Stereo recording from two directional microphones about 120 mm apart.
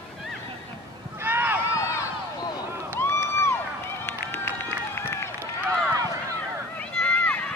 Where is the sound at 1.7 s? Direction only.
25° left (ahead or behind).